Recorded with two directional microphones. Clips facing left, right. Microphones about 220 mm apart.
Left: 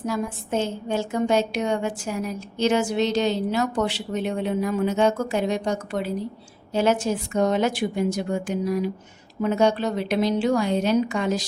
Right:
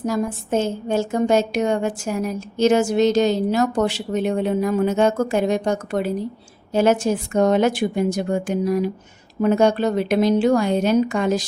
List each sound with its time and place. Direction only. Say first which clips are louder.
0.0 s a woman's voice: right 4 dB; 45° right (ahead or behind)